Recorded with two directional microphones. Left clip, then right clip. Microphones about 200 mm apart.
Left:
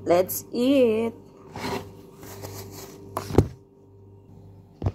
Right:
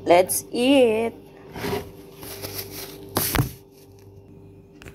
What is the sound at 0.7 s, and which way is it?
Speech, 30° left (ahead or behind).